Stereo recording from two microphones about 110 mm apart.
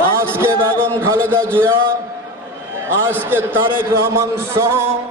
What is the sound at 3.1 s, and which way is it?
A man's voice, 20° right (ahead or behind).